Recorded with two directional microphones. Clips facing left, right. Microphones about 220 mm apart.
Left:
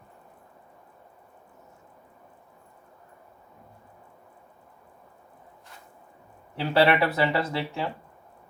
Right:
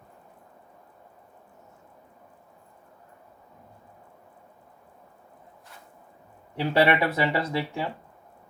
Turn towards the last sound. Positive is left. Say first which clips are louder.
# even
turn(degrees=-15)  # may be behind; listen again after turning